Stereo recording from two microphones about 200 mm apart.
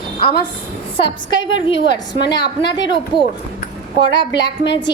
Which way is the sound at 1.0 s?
25° left (ahead or behind).